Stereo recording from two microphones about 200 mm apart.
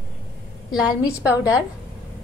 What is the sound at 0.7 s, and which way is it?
Speech, 5° right (ahead or behind).